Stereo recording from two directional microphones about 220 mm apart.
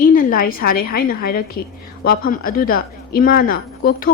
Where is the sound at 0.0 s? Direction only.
40° left (ahead or behind).